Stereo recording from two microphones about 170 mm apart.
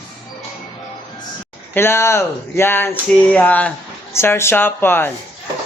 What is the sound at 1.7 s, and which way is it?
Speech, 15° left (ahead or behind).